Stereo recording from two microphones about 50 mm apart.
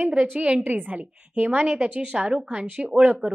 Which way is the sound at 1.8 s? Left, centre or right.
Right.